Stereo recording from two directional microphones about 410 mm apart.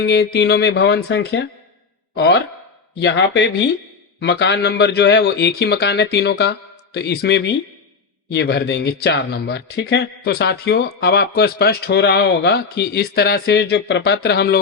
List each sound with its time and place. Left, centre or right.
0.0 s speech: left